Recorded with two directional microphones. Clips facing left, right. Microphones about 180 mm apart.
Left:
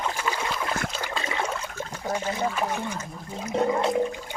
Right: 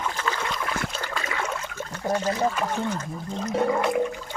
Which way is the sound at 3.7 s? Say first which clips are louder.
Even; 30° left (ahead or behind).